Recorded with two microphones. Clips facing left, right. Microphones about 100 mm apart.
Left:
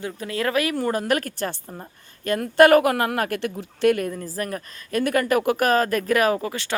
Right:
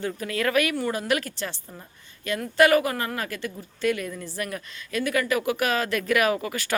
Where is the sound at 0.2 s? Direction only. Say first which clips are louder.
Left 1 dB; 30° left (ahead or behind).